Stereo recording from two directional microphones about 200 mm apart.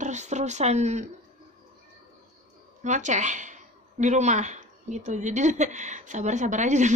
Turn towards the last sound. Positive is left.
turn(degrees=-35)  # may be behind; listen again after turning